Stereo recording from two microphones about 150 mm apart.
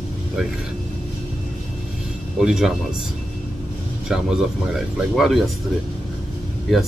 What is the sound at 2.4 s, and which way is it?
Speech, 5° right (ahead or behind).